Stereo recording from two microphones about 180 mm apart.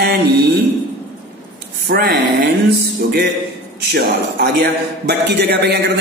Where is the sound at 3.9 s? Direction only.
60° right (ahead or behind).